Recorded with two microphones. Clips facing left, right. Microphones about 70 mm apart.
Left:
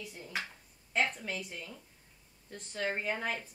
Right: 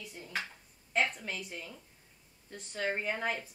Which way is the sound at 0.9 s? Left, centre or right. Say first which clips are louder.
Even; centre.